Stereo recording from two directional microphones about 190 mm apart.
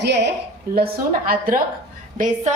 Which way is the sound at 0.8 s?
50° right (ahead or behind).